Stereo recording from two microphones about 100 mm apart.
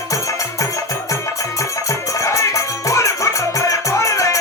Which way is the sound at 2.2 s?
30° left (ahead or behind).